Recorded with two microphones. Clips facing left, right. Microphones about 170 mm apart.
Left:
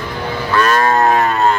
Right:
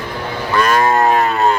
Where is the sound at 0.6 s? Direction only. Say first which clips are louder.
Even; 15° right (ahead or behind).